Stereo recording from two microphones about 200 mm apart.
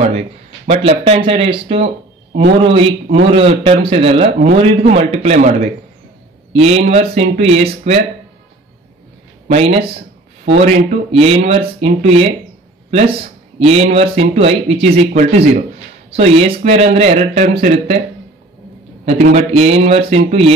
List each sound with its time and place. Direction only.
0.7 s a man's voice: 30° right (ahead or behind)
6.5 s a man's voice: 30° right (ahead or behind)
9.5 s a man's voice: 30° right (ahead or behind)
13.7 s a man's voice: 30° right (ahead or behind)
19.0 s a man's voice: 30° right (ahead or behind)